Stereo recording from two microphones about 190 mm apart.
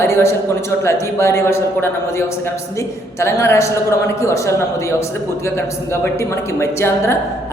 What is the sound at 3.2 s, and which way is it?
A woman's voice, 15° left (ahead or behind).